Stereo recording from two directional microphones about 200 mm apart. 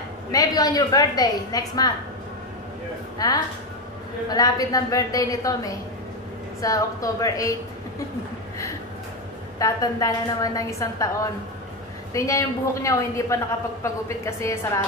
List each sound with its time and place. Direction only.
0.3 s a woman's voice: 20° left (ahead or behind)
3.2 s a woman's voice: 20° left (ahead or behind)
9.6 s a woman's voice: 15° left (ahead or behind)
12.1 s a woman's voice: 15° left (ahead or behind)